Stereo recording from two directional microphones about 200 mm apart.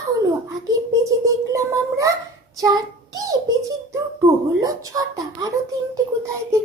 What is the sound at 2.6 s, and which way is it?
Speech, 20° right (ahead or behind).